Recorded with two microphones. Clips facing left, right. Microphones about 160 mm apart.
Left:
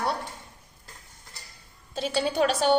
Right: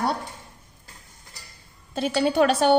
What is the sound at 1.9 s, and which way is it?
Speech, 55° right (ahead or behind).